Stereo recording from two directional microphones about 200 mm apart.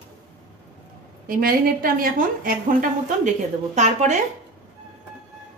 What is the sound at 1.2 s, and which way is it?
A woman's voice, 45° right (ahead or behind).